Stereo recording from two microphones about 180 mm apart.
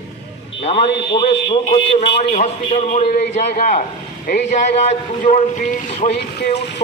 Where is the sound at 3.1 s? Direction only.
65° left (ahead or behind).